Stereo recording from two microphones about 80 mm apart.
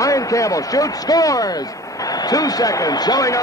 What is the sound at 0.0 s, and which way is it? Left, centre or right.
Speech, left.